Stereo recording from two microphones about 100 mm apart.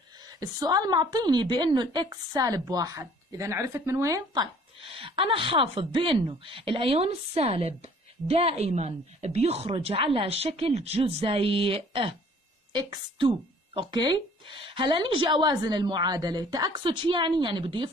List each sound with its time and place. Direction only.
0.2 s a woman's voice: 40° right (ahead or behind)
4.8 s a woman's voice: 65° right (ahead or behind)
12.7 s a woman's voice: 45° right (ahead or behind)
16.7 s a woman's voice: 55° right (ahead or behind)